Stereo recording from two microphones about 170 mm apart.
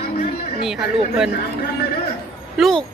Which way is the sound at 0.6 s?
Centre (ahead or behind).